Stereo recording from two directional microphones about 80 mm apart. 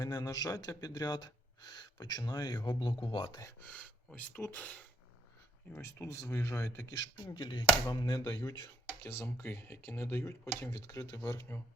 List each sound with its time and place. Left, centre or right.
0.0 s speech: left
3.0 s speech: left
3.6 s speech: centre
5.7 s speech: left
7.3 s speech: left
9.0 s speech: left